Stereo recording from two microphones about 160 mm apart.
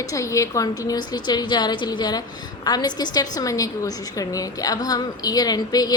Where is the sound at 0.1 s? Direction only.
20° left (ahead or behind).